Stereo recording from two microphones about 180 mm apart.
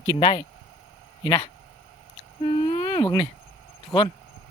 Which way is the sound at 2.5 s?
30° left (ahead or behind).